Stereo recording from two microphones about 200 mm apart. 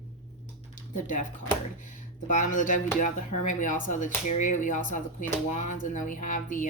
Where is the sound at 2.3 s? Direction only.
40° left (ahead or behind).